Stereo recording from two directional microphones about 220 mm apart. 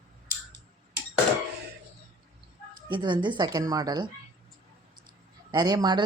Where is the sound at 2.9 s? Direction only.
20° right (ahead or behind).